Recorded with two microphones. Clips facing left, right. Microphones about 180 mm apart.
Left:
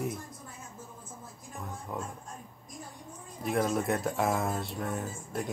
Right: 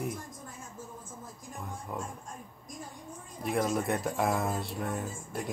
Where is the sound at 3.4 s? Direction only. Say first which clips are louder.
Left 1 dB; centre (ahead or behind).